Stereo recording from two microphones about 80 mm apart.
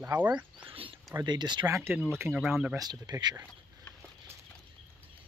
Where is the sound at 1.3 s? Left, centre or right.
Right.